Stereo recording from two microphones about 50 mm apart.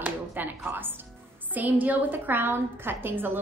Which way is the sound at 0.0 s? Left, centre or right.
Right.